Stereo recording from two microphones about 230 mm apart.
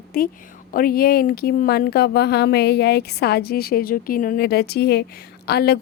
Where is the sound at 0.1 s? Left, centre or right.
Left.